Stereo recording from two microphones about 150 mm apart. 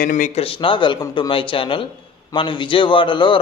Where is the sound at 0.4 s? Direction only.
35° left (ahead or behind).